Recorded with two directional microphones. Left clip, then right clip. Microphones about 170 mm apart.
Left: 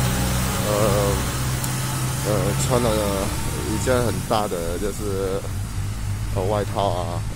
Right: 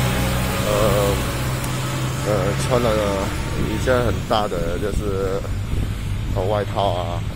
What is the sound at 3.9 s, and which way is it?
Speech, 25° left (ahead or behind).